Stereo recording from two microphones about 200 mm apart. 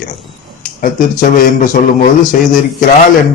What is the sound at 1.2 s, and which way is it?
Speech, 40° left (ahead or behind).